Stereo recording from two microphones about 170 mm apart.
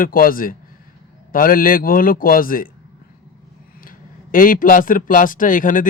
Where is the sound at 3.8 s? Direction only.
55° left (ahead or behind).